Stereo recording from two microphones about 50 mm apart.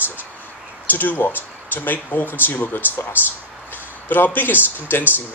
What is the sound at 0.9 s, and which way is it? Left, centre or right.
Speech, left.